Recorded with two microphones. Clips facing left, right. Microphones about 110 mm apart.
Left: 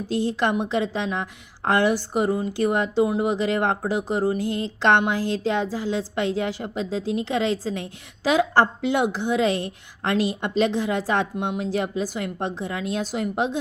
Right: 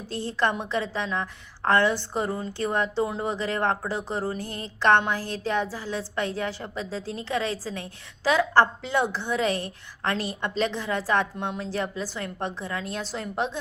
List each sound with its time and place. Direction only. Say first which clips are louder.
0.1 s a woman's voice: left 3 dB; 15° left (ahead or behind)